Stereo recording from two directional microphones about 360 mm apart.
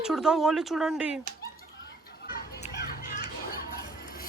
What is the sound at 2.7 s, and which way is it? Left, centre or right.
Children playing, left.